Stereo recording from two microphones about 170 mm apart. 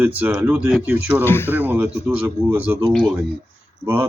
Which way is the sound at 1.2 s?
15° left (ahead or behind).